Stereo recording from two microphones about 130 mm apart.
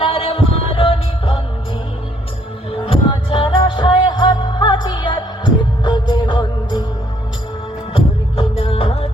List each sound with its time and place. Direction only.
0.0 s a sound: 50° left (ahead or behind)
2.8 s music: 40° left (ahead or behind)
7.9 s music: 45° left (ahead or behind)